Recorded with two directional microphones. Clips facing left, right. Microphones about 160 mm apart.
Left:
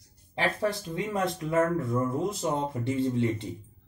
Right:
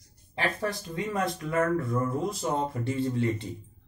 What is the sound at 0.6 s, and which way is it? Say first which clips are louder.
Speech: left 2 dB; 25° left (ahead or behind).